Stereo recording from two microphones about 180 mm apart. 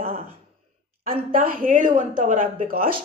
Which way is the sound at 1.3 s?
50° right (ahead or behind).